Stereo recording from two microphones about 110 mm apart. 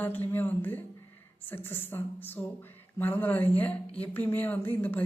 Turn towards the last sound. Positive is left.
turn(degrees=15)  # may be behind; listen again after turning